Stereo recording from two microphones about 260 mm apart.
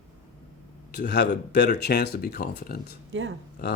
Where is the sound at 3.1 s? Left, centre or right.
Right.